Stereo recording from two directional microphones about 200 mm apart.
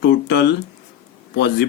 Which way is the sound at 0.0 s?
60° left (ahead or behind).